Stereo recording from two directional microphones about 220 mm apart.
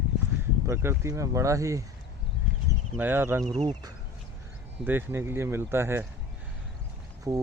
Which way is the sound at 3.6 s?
20° right (ahead or behind).